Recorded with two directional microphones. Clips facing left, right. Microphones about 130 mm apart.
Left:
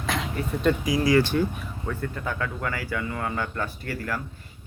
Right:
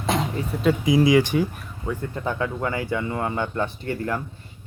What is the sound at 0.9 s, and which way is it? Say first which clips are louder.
Speech: right 6 dB; 20° right (ahead or behind).